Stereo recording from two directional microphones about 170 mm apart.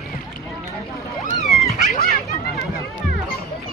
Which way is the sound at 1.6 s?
45° left (ahead or behind).